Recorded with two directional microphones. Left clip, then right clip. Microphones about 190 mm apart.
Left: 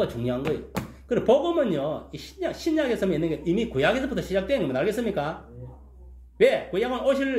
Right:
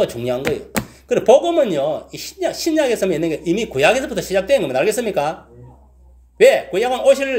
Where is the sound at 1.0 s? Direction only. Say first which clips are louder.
Right 8 dB; 15° right (ahead or behind).